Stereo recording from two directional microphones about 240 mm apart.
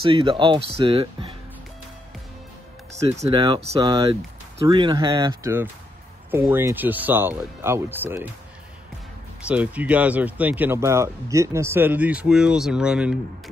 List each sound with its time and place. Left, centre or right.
0.0 s speech: right
3.1 s speech: right
9.4 s speech: centre